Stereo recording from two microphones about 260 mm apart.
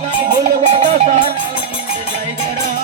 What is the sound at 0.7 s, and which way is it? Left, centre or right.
Music, right.